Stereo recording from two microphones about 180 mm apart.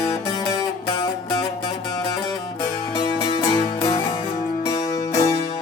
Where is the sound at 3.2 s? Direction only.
25° left (ahead or behind).